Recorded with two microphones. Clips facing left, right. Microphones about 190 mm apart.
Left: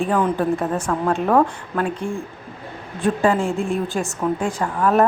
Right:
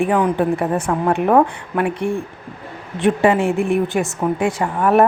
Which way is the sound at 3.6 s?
65° right (ahead or behind).